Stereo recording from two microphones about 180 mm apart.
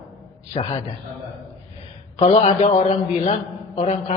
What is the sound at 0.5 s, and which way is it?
Speech, 35° left (ahead or behind).